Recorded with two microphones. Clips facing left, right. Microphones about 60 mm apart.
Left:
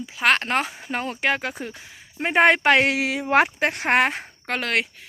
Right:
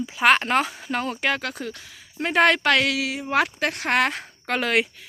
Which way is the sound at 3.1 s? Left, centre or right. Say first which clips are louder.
Left 4 dB; left.